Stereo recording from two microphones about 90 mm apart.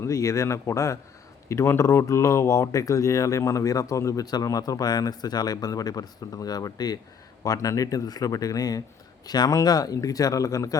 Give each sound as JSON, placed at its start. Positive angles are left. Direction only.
{"t": 0.0, "sound": "speech", "side_deg": 35}